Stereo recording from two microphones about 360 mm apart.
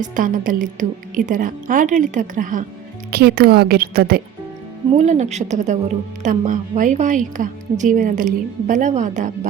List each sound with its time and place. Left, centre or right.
0.0 s a woman's voice: right